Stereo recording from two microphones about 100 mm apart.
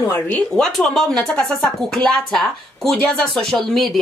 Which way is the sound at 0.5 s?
5° left (ahead or behind).